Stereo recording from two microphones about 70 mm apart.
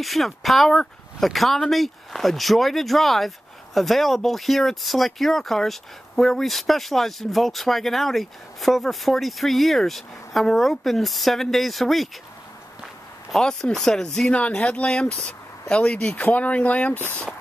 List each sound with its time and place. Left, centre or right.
0.0 s speech: centre
13.3 s speech: centre; by 17.2 s left